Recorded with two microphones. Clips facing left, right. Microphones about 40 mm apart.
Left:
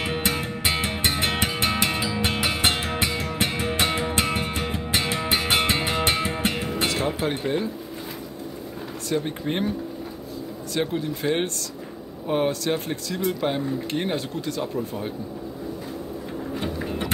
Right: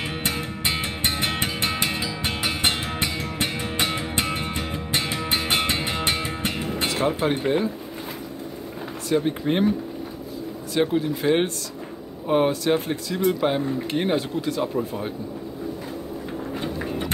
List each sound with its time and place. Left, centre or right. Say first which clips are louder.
0.1 s music: left 2 dB; centre
6.9 s speech: right 2 dB; centre
9.2 s speech: right 4 dB; centre
10.7 s speech: right 4 dB; centre
16.6 s vehicle: even; centre